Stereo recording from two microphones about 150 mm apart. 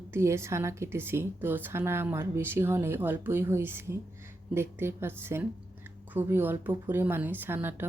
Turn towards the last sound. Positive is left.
turn(degrees=-15)  # may be behind; listen again after turning